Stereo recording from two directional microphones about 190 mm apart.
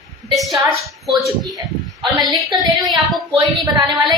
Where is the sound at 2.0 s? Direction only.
20° right (ahead or behind).